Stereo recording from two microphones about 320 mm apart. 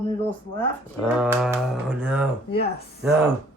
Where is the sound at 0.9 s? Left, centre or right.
Centre.